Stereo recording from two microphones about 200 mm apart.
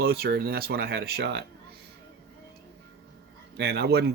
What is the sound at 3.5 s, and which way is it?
Speech, 55° right (ahead or behind).